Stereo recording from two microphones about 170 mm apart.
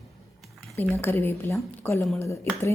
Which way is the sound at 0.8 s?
10° left (ahead or behind).